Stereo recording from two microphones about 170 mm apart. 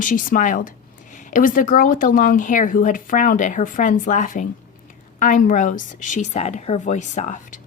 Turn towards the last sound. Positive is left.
turn(degrees=50)  # may be behind; listen again after turning